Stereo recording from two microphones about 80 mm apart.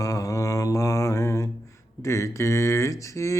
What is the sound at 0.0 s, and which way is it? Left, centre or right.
Mantra, left.